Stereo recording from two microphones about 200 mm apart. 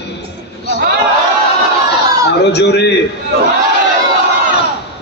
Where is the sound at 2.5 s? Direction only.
55° left (ahead or behind).